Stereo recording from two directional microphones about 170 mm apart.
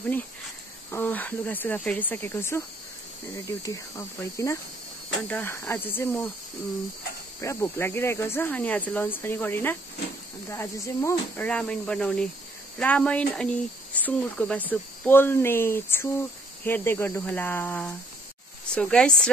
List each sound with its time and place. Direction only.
0.9 s speech: 10° left (ahead or behind)
7.3 s speech: 15° left (ahead or behind)